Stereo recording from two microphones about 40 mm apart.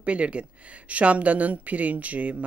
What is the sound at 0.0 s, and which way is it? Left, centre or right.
Speech, right.